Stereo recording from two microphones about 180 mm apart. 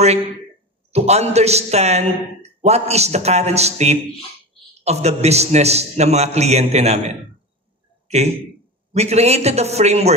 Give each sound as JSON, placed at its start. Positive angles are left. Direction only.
{"t": 0.9, "sound": "a man's voice", "side_deg": -35}
{"t": 8.9, "sound": "a man's voice", "side_deg": -35}